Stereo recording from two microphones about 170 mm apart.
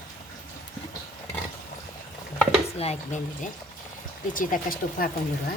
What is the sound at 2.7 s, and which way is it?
Speech, 40° left (ahead or behind).